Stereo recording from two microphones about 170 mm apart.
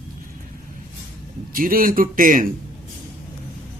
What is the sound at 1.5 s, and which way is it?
A man's voice, 55° right (ahead or behind).